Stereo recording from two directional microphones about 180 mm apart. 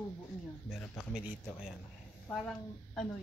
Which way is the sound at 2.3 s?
Centre (ahead or behind).